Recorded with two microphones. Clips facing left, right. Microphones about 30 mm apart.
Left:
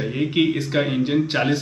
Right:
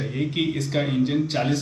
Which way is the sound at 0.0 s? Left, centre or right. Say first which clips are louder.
Left 5 dB; left.